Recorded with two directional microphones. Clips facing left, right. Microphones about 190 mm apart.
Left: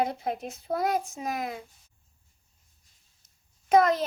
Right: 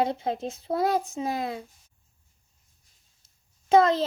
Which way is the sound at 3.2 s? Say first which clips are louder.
Even; 25° right (ahead or behind).